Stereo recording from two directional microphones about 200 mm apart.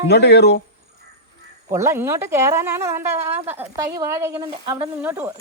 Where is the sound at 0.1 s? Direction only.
55° left (ahead or behind).